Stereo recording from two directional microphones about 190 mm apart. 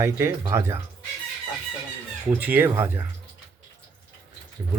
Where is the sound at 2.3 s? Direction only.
10° right (ahead or behind).